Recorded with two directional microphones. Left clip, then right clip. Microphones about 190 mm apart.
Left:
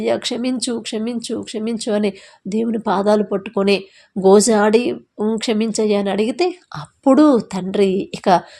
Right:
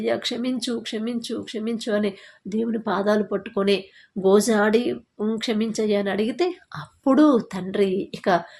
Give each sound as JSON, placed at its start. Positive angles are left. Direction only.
{"t": 0.0, "sound": "speech", "side_deg": 45}